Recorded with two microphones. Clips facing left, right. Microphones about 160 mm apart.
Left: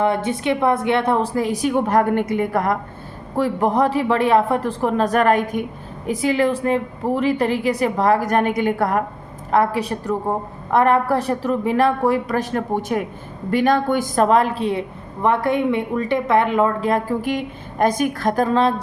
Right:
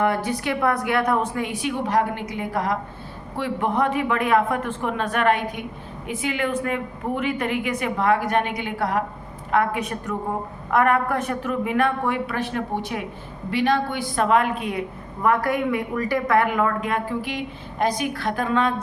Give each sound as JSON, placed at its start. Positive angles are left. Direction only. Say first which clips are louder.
{"t": 0.0, "sound": "a woman's voice", "louder": "left 3 dB", "side_deg": 25}
{"t": 3.3, "sound": "a woman's voice", "louder": "left 5 dB", "side_deg": 40}
{"t": 9.5, "sound": "a woman's voice", "louder": "left 4 dB", "side_deg": 35}